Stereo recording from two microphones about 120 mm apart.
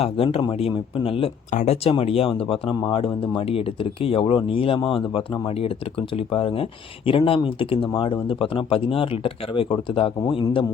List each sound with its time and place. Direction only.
0.0 s speech: 55° left (ahead or behind)
1.5 s speech: 75° left (ahead or behind); by 10.7 s 45° left (ahead or behind)